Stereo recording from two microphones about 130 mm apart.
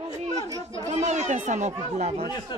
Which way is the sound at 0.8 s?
60° right (ahead or behind).